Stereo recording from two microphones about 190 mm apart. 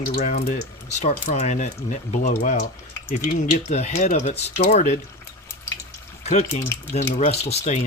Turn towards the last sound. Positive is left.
turn(degrees=35)  # may be behind; listen again after turning